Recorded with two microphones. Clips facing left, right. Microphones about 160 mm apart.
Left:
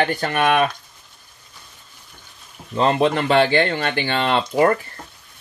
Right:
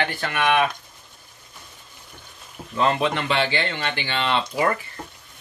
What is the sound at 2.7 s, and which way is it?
Speech, 30° left (ahead or behind).